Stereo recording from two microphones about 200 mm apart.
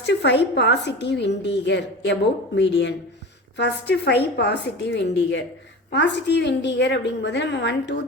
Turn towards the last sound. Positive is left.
turn(degrees=60)  # may be behind; listen again after turning